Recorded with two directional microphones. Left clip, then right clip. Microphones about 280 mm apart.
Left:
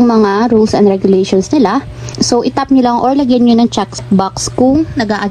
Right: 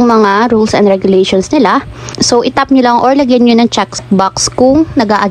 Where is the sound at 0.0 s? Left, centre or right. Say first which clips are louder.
Right 3 dB; left.